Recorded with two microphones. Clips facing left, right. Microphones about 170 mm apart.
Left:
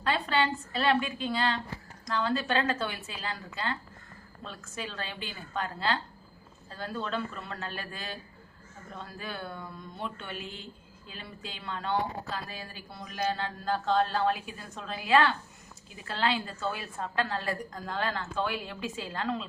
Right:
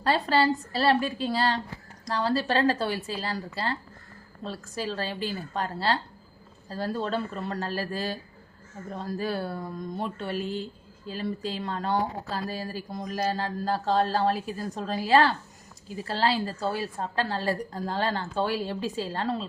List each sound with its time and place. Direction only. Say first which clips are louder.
0.0 s speech: right 5 dB; 35° right (ahead or behind)